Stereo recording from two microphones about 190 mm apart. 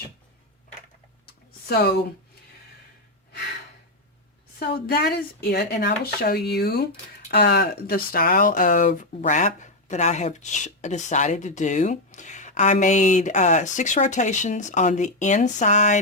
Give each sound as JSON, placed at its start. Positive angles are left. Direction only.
{"t": 1.6, "sound": "speech", "side_deg": 55}
{"t": 4.6, "sound": "speech", "side_deg": 55}